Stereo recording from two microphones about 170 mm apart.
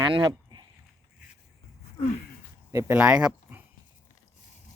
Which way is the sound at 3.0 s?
5° right (ahead or behind).